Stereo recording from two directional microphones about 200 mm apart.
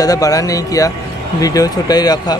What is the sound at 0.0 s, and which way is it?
Speech, 15° left (ahead or behind).